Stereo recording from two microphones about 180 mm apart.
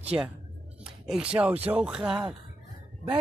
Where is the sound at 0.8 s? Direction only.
5° right (ahead or behind).